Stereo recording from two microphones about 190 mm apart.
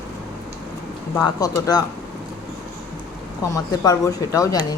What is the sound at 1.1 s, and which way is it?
Speech, 20° left (ahead or behind).